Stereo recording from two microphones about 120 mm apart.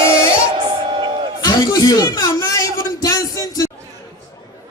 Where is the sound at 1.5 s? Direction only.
35° left (ahead or behind).